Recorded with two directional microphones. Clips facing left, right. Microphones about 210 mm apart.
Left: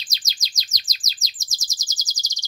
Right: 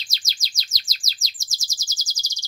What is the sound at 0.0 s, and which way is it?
Chirp, 15° left (ahead or behind).